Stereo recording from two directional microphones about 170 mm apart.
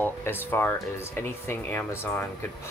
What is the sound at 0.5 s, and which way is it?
Speech, 15° left (ahead or behind).